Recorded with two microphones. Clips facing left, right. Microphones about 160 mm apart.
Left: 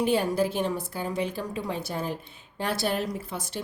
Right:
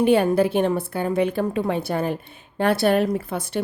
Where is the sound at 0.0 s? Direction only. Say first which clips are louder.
Right 7 dB; 60° right (ahead or behind).